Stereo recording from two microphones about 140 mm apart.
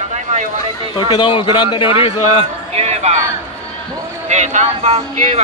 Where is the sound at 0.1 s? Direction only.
60° right (ahead or behind).